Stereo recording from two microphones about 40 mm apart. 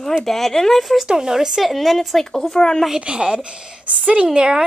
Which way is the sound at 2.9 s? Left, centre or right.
Right.